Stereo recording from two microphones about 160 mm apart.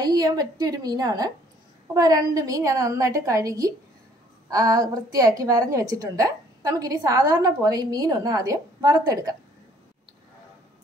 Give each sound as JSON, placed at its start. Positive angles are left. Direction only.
{"t": 0.0, "sound": "a woman's voice", "side_deg": -20}